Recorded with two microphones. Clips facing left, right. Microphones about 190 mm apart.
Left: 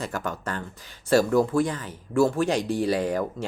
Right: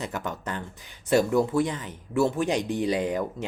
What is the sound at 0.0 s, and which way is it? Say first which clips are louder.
Speech: left 2 dB; 20° right (ahead or behind).